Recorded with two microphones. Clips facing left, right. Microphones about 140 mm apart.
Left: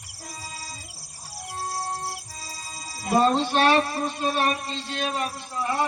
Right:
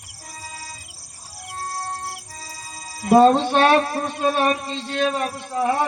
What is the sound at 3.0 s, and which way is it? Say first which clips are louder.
Speech: right 7 dB; 55° right (ahead or behind).